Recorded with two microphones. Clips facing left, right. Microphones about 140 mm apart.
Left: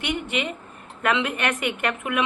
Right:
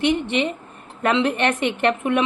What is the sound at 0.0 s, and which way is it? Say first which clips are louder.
A woman's voice: right 7 dB; 30° right (ahead or behind).